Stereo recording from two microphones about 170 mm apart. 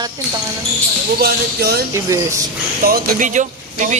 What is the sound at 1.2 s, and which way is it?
Speech, 65° right (ahead or behind).